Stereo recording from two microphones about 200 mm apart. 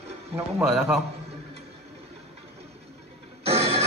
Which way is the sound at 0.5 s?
5° right (ahead or behind).